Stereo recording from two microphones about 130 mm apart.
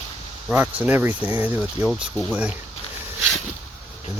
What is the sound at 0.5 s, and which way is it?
Speech, 15° right (ahead or behind).